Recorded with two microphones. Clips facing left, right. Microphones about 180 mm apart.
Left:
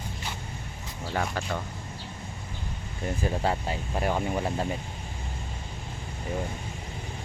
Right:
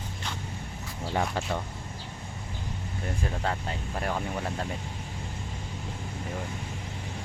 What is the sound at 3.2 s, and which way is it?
Speech, 10° left (ahead or behind).